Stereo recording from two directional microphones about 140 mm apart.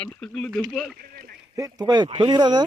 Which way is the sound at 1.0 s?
90° right.